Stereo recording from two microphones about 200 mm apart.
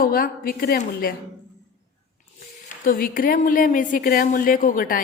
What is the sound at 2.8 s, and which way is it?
A woman's voice, 45° left (ahead or behind).